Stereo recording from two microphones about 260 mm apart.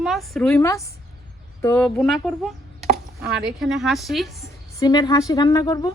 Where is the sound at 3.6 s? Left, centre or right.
Centre.